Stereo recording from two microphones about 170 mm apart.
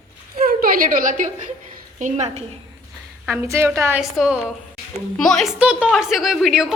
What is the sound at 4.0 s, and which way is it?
A woman's voice, 5° right (ahead or behind).